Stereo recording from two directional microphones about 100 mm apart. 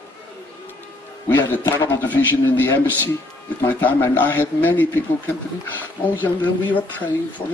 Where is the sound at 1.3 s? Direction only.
20° left (ahead or behind).